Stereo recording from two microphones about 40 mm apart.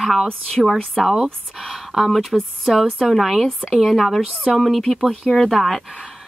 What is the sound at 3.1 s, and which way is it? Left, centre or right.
Speech, centre.